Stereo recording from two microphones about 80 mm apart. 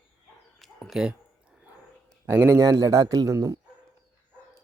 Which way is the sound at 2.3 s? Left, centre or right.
Right.